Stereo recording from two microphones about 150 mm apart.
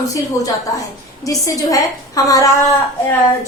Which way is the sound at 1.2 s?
20° left (ahead or behind).